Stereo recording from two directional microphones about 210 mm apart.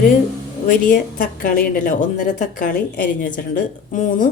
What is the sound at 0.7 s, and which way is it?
A woman's voice, 40° left (ahead or behind).